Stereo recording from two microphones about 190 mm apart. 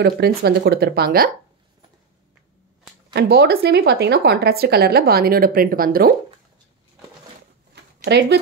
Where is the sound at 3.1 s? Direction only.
60° right (ahead or behind).